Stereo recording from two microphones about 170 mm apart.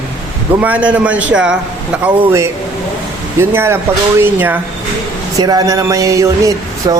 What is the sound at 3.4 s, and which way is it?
A man's voice, 15° right (ahead or behind).